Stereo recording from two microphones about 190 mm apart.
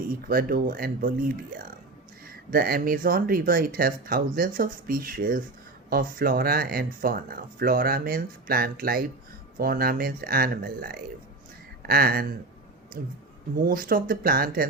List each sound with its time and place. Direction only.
0.3 s speech: 50° right (ahead or behind)
2.3 s speech: 50° right (ahead or behind)